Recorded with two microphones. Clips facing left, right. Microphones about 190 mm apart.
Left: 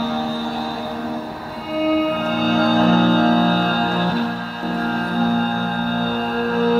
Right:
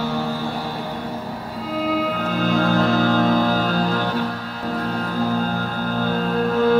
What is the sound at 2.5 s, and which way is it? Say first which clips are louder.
Music: left 3 dB; 35° left (ahead or behind).